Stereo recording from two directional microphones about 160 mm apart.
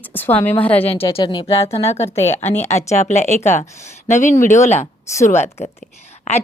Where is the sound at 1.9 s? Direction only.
45° left (ahead or behind).